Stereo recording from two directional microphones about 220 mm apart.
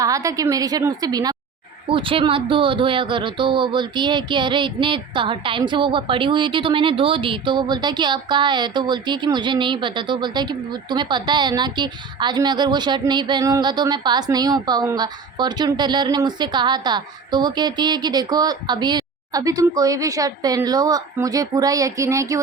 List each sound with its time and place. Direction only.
0.0 s a woman's voice: 15° right (ahead or behind)